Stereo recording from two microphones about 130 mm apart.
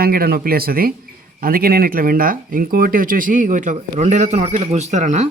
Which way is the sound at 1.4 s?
90° right.